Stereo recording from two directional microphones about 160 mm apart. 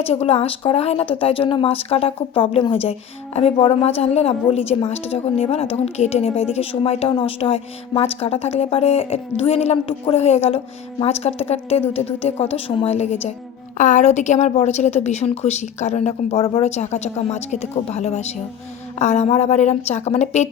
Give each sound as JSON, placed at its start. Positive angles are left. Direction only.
{"t": 0.0, "sound": "a woman's voice", "side_deg": 40}